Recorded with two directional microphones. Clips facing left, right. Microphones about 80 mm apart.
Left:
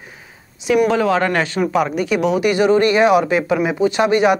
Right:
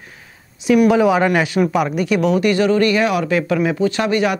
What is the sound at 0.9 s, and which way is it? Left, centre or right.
A woman's voice, centre.